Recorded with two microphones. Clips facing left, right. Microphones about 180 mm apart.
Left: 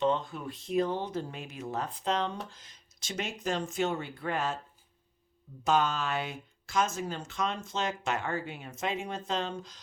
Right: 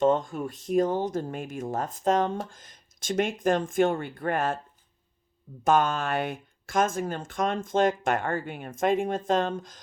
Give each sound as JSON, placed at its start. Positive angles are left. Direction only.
{"t": 0.0, "sound": "speech", "side_deg": -45}
{"t": 5.6, "sound": "speech", "side_deg": -50}